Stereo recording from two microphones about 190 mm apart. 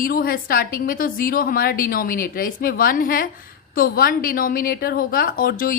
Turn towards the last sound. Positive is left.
turn(degrees=50)  # may be behind; listen again after turning